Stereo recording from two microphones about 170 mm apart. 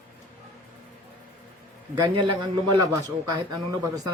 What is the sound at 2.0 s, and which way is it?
Speech, 25° right (ahead or behind).